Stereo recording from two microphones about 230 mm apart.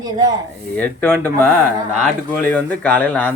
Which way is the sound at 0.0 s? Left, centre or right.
Centre.